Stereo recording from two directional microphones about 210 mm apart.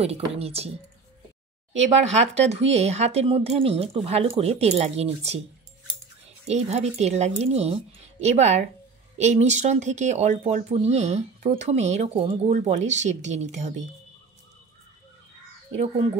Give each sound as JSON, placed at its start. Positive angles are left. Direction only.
{"t": 0.0, "sound": "speech", "side_deg": -30}
{"t": 2.0, "sound": "speech", "side_deg": -30}
{"t": 6.4, "sound": "speech", "side_deg": -30}